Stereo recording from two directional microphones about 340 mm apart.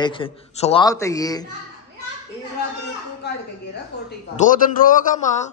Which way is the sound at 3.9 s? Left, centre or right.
Left.